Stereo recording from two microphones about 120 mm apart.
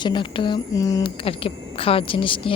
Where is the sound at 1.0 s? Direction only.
50° left (ahead or behind).